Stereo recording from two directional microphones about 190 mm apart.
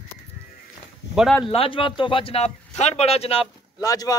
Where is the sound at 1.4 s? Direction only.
30° left (ahead or behind).